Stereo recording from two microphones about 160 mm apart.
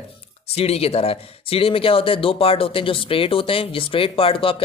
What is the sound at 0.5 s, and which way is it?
Speech, 40° left (ahead or behind).